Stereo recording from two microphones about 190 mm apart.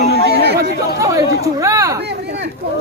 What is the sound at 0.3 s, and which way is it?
Chatter, 60° right (ahead or behind).